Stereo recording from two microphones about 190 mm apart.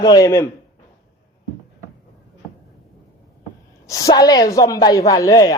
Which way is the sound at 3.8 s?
15° left (ahead or behind).